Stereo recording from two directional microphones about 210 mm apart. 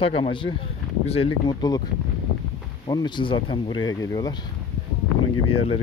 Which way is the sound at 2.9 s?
20° left (ahead or behind).